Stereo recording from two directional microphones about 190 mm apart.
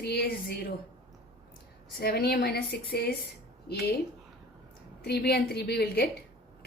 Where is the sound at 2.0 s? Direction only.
55° left (ahead or behind).